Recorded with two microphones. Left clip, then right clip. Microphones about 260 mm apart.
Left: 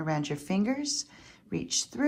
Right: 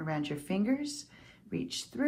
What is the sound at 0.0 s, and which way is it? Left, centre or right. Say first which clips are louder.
Speech: left 4 dB; left.